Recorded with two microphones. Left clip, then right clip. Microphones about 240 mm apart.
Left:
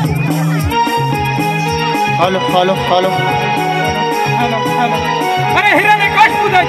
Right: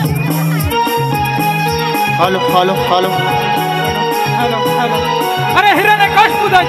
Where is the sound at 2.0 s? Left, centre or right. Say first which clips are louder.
Right 1 dB; right.